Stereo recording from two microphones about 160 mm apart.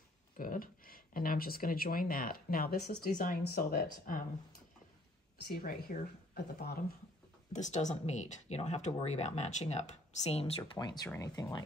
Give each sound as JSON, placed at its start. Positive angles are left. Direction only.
{"t": 0.4, "sound": "speech", "side_deg": 60}
{"t": 4.1, "sound": "speech", "side_deg": 60}
{"t": 5.5, "sound": "speech", "side_deg": 65}
{"t": 7.5, "sound": "speech", "side_deg": 50}
{"t": 10.8, "sound": "speech", "side_deg": 25}